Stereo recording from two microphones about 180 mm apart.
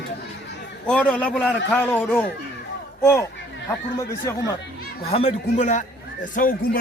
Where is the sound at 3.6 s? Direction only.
15° left (ahead or behind).